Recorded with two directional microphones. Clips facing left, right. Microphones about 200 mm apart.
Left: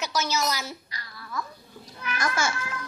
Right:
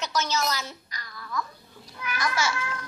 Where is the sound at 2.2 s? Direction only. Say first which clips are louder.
Even; 50° left (ahead or behind).